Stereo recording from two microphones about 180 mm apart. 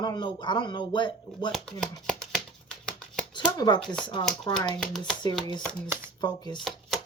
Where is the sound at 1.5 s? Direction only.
Centre (ahead or behind).